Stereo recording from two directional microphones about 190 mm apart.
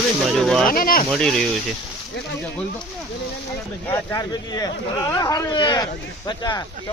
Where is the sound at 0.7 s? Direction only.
50° left (ahead or behind).